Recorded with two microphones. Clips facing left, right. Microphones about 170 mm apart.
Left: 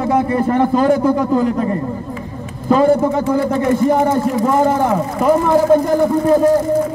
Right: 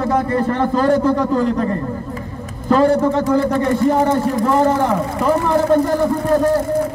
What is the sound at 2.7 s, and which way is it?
Speech, 10° left (ahead or behind).